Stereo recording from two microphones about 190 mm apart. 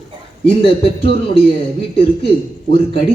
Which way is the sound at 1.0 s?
65° right (ahead or behind).